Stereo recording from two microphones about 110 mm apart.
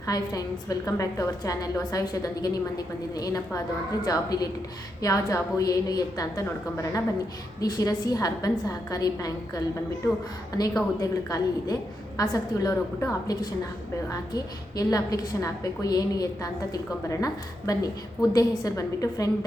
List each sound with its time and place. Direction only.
0.0 s a woman's voice: 35° left (ahead or behind)
7.6 s a woman's voice: 35° left (ahead or behind)
14.1 s a woman's voice: 35° left (ahead or behind)